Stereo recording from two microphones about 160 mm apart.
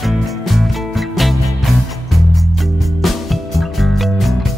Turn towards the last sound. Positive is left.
turn(degrees=0)  # may be behind; listen again after turning